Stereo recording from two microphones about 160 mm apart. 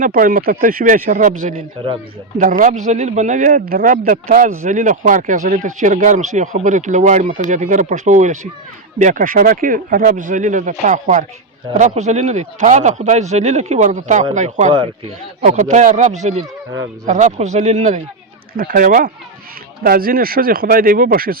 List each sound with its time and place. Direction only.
0.0 s speech: 60° right (ahead or behind)
18.5 s speech: 60° right (ahead or behind)